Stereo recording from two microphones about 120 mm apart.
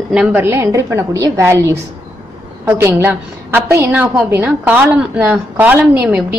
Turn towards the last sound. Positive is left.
turn(degrees=-15)  # may be behind; listen again after turning